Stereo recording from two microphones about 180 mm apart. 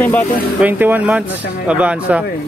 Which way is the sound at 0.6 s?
10° right (ahead or behind).